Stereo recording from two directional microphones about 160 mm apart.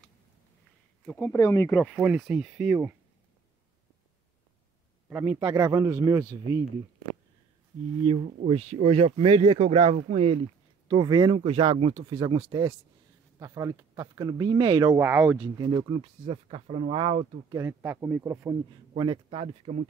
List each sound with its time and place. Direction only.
1.0 s speech: 5° left (ahead or behind)
1.3 s speech: 20° left (ahead or behind)
1.8 s speech: 5° right (ahead or behind)
5.1 s speech: 10° right (ahead or behind)
5.5 s speech: 20° right (ahead or behind)
8.0 s speech: 35° right (ahead or behind)
10.9 s speech: 30° right (ahead or behind)
12.2 s speech: 30° right (ahead or behind)
15.0 s speech: 15° right (ahead or behind)
15.5 s speech: 25° right (ahead or behind)
17.5 s speech: 15° right (ahead or behind)
18.9 s speech: 35° right (ahead or behind)